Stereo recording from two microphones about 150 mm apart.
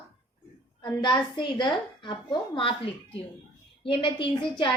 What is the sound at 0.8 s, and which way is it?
A woman's voice, 30° left (ahead or behind).